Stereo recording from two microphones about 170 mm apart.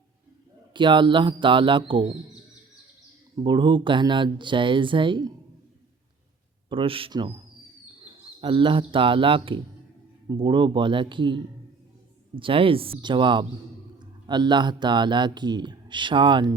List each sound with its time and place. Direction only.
0.7 s speech: 30° right (ahead or behind)
3.3 s speech: 25° right (ahead or behind)
6.7 s speech: 30° right (ahead or behind)
12.4 s speech: 30° right (ahead or behind)